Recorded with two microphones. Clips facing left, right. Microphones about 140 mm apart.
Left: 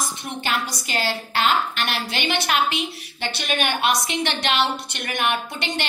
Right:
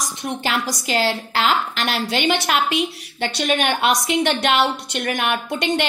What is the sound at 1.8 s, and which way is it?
A woman's voice, 60° right (ahead or behind).